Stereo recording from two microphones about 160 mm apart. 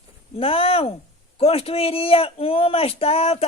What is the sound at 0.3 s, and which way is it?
A man's voice, 35° left (ahead or behind).